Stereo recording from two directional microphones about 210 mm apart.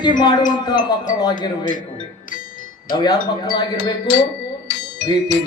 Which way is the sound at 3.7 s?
75° left (ahead or behind).